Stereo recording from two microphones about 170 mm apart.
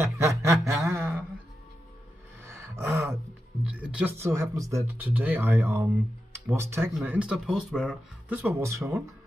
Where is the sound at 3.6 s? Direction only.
10° right (ahead or behind).